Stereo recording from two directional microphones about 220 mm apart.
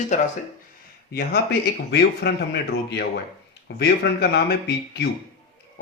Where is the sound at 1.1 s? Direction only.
45° left (ahead or behind).